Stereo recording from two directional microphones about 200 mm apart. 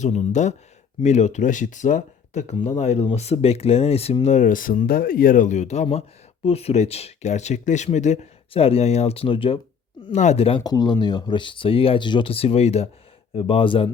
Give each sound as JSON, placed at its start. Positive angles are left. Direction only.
{"t": 0.0, "sound": "speech", "side_deg": 35}